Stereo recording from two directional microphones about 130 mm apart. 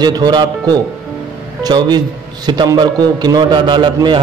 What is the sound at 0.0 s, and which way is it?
A man's voice, 35° right (ahead or behind).